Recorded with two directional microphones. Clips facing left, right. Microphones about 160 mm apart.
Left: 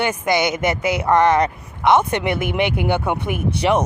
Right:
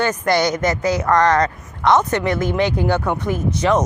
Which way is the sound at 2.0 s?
10° left (ahead or behind).